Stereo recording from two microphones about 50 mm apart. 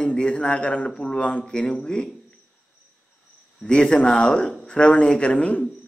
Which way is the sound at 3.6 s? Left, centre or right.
Centre.